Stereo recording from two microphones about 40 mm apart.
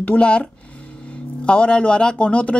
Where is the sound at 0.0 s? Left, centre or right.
Left.